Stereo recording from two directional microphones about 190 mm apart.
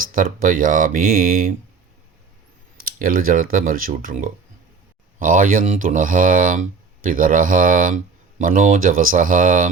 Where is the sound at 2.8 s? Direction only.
50° right (ahead or behind).